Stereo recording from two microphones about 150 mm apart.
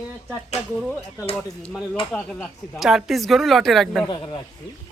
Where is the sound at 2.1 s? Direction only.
5° left (ahead or behind).